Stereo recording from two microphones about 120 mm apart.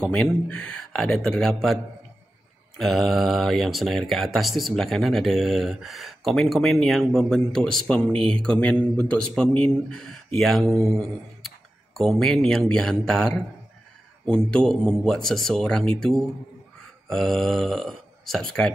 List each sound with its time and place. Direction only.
0.0 s a man's voice: 5° left (ahead or behind)
2.8 s a man's voice: centre (ahead or behind)